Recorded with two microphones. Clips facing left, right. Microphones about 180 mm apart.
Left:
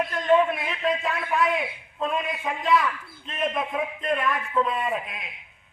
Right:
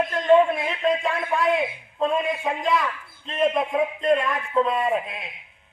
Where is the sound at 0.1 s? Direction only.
25° right (ahead or behind).